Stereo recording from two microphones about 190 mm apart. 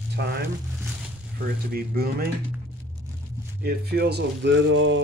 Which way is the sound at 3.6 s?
55° right (ahead or behind).